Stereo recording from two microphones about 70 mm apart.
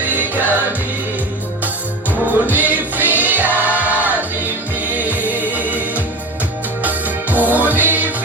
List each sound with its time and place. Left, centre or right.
0.1 s music: right
1.6 s music: right
3.6 s choir: right
4.9 s music: right
6.8 s music: right